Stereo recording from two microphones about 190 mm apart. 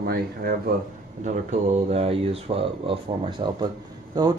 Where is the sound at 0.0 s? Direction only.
55° right (ahead or behind).